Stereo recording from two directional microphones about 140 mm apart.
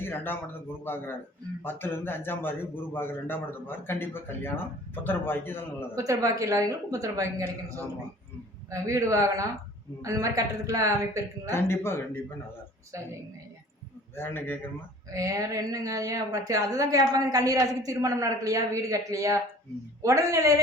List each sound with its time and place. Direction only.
0.0 s a man's voice: 15° left (ahead or behind)
1.6 s a man's voice: 15° left (ahead or behind)
6.0 s a woman's voice: 20° right (ahead or behind)
8.7 s a woman's voice: 20° right (ahead or behind)
11.5 s a man's voice: 15° left (ahead or behind)
14.2 s a man's voice: 15° left (ahead or behind)
15.1 s a woman's voice: 25° right (ahead or behind)